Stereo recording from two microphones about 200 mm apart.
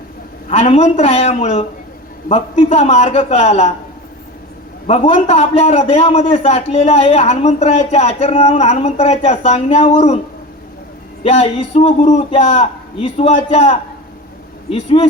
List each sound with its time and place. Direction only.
0.5 s a man's voice: 30° left (ahead or behind)
4.9 s a man's voice: 30° left (ahead or behind)
11.2 s a man's voice: 30° left (ahead or behind)